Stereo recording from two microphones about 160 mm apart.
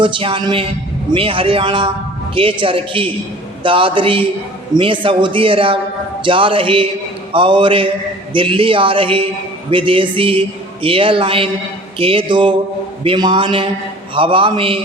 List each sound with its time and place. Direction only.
0.0 s speech: 30° right (ahead or behind)